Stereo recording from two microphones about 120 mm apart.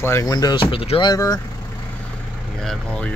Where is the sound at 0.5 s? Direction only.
50° left (ahead or behind).